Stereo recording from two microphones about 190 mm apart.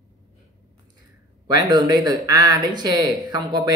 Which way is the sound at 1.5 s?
20° right (ahead or behind).